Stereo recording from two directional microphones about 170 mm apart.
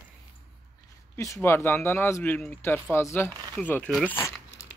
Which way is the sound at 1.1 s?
15° left (ahead or behind).